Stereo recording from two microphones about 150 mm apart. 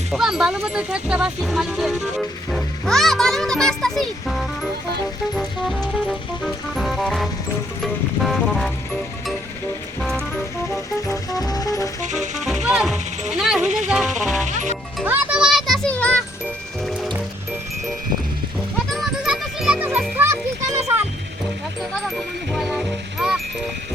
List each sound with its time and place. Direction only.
0.1 s speech: 5° right (ahead or behind)
5.3 s music: centre (ahead or behind)
10.0 s music: centre (ahead or behind)
10.7 s music: 25° left (ahead or behind)
12.0 s music: 50° right (ahead or behind)
12.6 s music: 5° right (ahead or behind)
13.6 s speech: 50° right (ahead or behind)
14.2 s speech: centre (ahead or behind)
14.4 s speech: 55° right (ahead or behind)
15.0 s music: 10° right (ahead or behind); by 16.2 s 10° left (ahead or behind)
18.9 s music: centre (ahead or behind); by 21.0 s 20° right (ahead or behind)
22.5 s music: 5° right (ahead or behind)